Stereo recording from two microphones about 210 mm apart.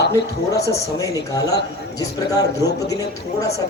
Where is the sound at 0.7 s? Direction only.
15° left (ahead or behind).